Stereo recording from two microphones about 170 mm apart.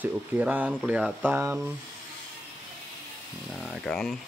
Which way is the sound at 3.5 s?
5° left (ahead or behind).